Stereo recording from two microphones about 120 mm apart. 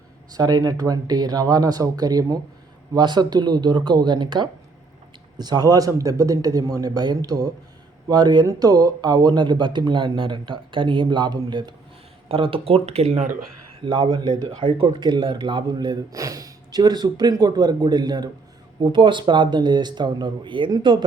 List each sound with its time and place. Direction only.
0.3 s speech: 30° right (ahead or behind)
12.3 s speech: 50° right (ahead or behind)
13.8 s speech: 45° right (ahead or behind)